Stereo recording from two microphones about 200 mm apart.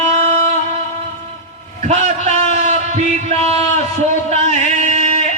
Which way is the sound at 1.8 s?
35° right (ahead or behind).